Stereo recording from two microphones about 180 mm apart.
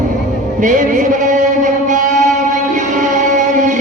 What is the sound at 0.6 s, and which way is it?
Music, 45° right (ahead or behind).